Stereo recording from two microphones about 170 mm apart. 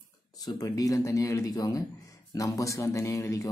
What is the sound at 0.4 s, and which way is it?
Speech, 20° left (ahead or behind).